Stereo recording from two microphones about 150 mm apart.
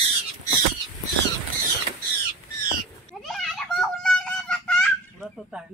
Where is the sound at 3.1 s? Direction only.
Centre (ahead or behind).